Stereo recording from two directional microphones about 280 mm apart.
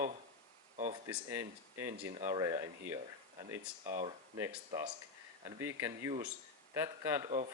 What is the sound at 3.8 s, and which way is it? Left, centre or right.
Speech, right.